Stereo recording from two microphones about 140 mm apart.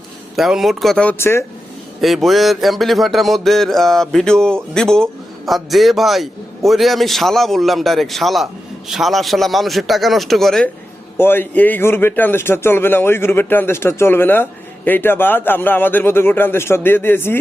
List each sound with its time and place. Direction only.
0.3 s speech: centre (ahead or behind)
1.2 s a man's voice: 15° left (ahead or behind)
2.0 s speech: centre (ahead or behind)
11.2 s a man's voice: 15° left (ahead or behind)